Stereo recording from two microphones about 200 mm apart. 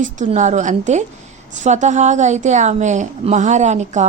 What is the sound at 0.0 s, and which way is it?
A woman's voice, 40° right (ahead or behind).